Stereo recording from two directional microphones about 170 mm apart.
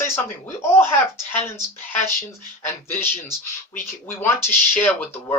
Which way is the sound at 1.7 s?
10° left (ahead or behind).